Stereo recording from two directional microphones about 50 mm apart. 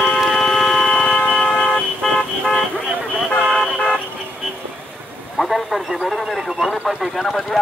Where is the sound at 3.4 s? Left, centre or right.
Centre.